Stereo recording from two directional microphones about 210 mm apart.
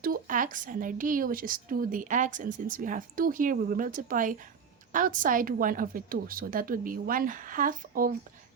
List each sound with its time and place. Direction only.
0.0 s speech: 40° right (ahead or behind)